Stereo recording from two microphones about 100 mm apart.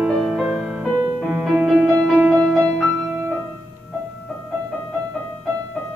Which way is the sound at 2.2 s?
20° right (ahead or behind).